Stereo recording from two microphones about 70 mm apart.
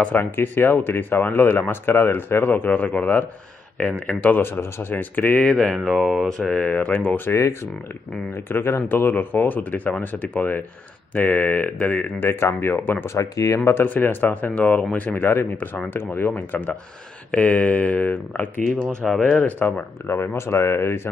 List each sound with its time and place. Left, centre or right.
0.0 s speech: left
5.5 s speech: centre
5.9 s speech: centre
6.2 s speech: centre
6.7 s speech: left
7.2 s speech: left
12.2 s speech: left
13.0 s speech: left
13.8 s speech: left
15.1 s speech: left
19.0 s speech: centre
19.4 s speech: left
20.1 s speech: left